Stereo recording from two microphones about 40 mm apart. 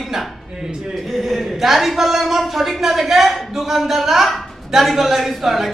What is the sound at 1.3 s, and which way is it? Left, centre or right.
A woman's voice, centre.